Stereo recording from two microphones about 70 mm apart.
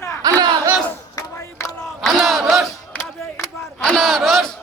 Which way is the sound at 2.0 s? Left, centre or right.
Centre.